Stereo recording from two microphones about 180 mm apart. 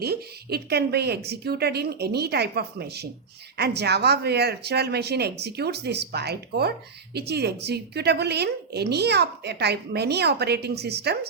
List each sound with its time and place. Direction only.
0.0 s speech: 60° right (ahead or behind)